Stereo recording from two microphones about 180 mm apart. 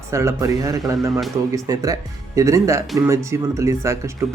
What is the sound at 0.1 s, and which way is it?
A man's voice, 15° right (ahead or behind).